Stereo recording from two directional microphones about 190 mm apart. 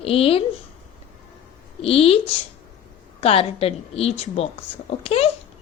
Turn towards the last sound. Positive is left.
turn(degrees=30)  # may be behind; listen again after turning